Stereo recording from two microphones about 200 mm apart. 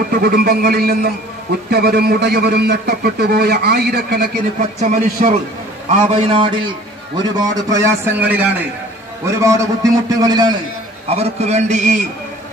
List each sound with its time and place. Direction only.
0.1 s a man's voice: 50° right (ahead or behind)
4.6 s a man's voice: 35° right (ahead or behind)
7.3 s a man's voice: 15° right (ahead or behind)
11.1 s a man's voice: 30° right (ahead or behind)